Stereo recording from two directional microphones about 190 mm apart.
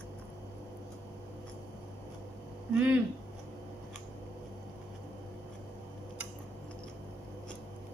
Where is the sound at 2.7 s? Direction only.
10° right (ahead or behind).